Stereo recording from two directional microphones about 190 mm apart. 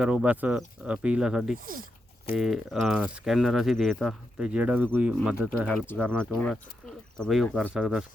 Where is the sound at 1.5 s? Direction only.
45° right (ahead or behind).